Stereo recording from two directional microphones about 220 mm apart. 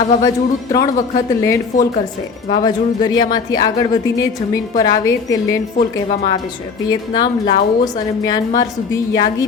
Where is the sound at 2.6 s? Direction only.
20° left (ahead or behind).